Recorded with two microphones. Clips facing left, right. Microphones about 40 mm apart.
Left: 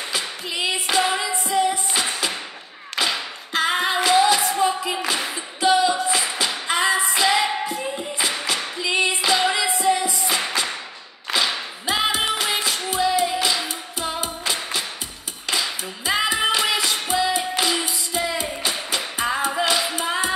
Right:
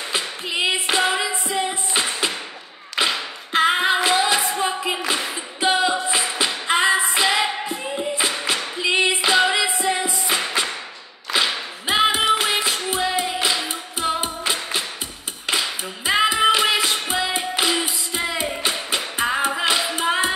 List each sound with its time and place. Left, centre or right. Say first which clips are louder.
0.1 s a sound: right 4 dB; right
1.2 s music: left 2 dB; right
3.0 s singing: right 2 dB; right
4.1 s music: left 2 dB; right
5.6 s singing: left 1 dB; right
6.3 s music: right 2 dB; right
7.2 s music: left 3 dB; right
7.8 s clapping: right 2 dB; centre
8.7 s female singing: right 2 dB; right
9.6 s music: left 1 dB; right
11.8 s music: right 4 dB; right
19.6 s a sound: even; right
20.0 s music: right 3 dB; right